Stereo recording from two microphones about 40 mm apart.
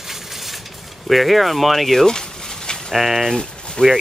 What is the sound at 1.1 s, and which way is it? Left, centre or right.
Speech, centre.